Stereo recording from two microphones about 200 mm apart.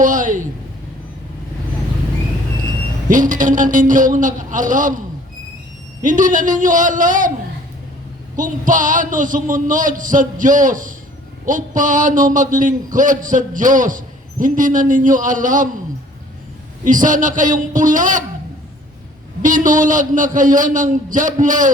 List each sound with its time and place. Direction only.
0.0 s a sound: 40° right (ahead or behind)
3.1 s a man's voice: 40° right (ahead or behind)
6.0 s a man's voice: 40° right (ahead or behind)
8.4 s a man's voice: 40° right (ahead or behind)
16.8 s a man's voice: 40° right (ahead or behind)
19.4 s a man's voice: 40° right (ahead or behind)